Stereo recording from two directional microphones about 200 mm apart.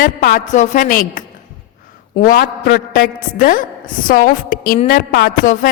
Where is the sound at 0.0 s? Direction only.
45° left (ahead or behind).